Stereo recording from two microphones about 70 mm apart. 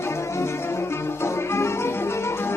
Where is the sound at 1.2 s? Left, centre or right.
Left.